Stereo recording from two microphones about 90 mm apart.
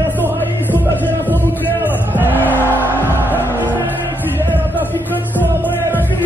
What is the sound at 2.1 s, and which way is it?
Music, 20° left (ahead or behind).